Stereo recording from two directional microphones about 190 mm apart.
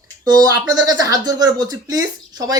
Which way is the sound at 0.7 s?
20° right (ahead or behind).